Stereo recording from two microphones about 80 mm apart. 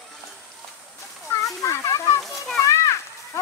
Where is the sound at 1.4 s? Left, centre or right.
Left.